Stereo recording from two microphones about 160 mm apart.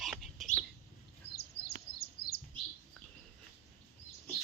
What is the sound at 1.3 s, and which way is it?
Bird, 90° left.